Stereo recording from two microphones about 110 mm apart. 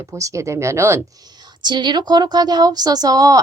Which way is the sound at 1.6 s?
40° right (ahead or behind).